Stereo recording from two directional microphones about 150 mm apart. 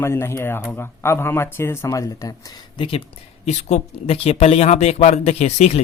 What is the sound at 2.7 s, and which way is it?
Speech, 35° left (ahead or behind).